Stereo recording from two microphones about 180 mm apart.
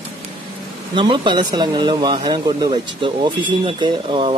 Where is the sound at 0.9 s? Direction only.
25° right (ahead or behind).